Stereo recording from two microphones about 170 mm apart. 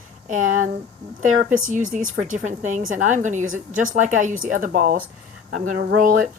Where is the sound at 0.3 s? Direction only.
45° right (ahead or behind).